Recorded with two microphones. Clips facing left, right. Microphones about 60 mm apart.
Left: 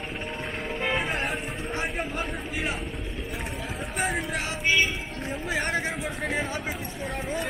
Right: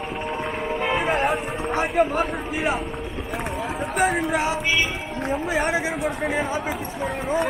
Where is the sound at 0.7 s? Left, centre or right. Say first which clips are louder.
Right 4 dB; centre.